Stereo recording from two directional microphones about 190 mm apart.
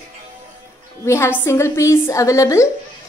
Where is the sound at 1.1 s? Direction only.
15° left (ahead or behind).